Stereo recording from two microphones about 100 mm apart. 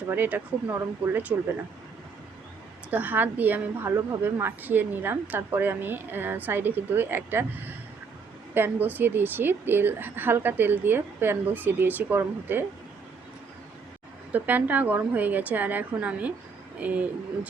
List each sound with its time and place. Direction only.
0.1 s a woman's voice: 20° right (ahead or behind)
2.9 s a woman's voice: 15° right (ahead or behind)
14.3 s a woman's voice: 15° right (ahead or behind)